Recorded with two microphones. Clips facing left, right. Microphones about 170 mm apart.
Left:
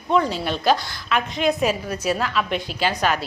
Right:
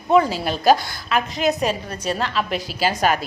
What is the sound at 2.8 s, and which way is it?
Speech, 45° right (ahead or behind).